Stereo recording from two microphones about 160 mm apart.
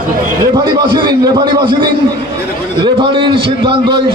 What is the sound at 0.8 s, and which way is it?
Speech, 30° right (ahead or behind).